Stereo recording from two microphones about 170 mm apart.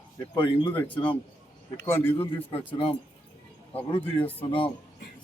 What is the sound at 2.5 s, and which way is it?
Speech, 35° left (ahead or behind).